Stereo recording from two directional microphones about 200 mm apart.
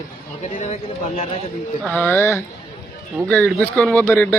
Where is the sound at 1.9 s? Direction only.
5° left (ahead or behind).